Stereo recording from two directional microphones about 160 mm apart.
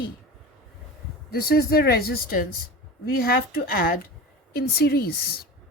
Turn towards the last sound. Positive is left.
turn(degrees=70)  # may be behind; listen again after turning